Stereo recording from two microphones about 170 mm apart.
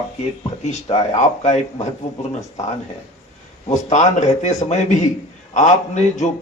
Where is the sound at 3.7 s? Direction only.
45° left (ahead or behind).